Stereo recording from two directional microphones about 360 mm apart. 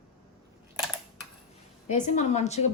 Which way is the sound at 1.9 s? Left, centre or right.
Centre.